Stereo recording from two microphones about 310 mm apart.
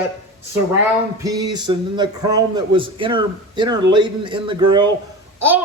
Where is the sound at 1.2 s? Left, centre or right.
Centre.